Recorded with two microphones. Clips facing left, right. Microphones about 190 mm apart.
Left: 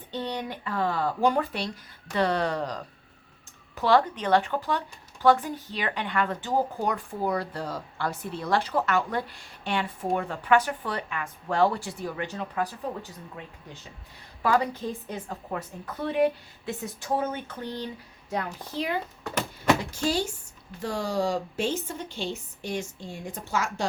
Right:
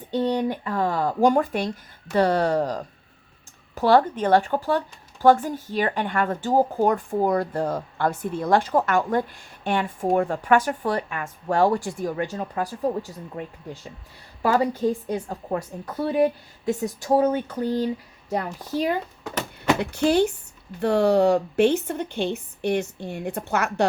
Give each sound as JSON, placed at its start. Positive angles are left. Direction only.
{"t": 0.2, "sound": "speech", "side_deg": -45}
{"t": 14.4, "sound": "a woman's voice", "side_deg": -40}
{"t": 19.8, "sound": "a woman's voice", "side_deg": -65}